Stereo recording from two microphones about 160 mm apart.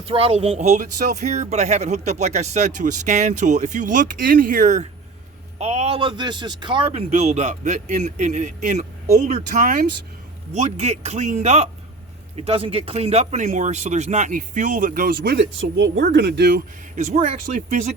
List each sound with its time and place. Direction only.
0.0 s speech: 35° right (ahead or behind); by 9.8 s 55° right (ahead or behind)
10.5 s speech: 45° right (ahead or behind); by 16.6 s 75° right (ahead or behind)
16.9 s speech: 50° right (ahead or behind)